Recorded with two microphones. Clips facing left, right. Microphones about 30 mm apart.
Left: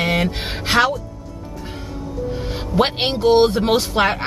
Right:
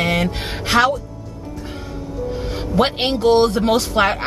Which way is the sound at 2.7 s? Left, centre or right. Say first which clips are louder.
Even; centre.